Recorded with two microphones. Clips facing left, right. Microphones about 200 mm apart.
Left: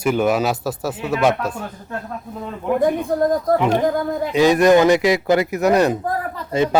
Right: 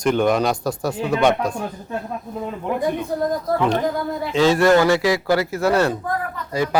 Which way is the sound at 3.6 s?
15° left (ahead or behind).